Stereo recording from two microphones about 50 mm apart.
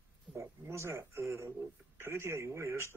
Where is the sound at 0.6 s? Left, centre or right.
Right.